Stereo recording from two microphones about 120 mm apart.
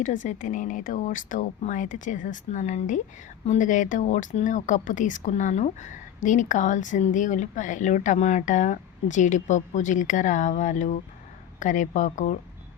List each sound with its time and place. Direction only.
0.0 s speech: 90° left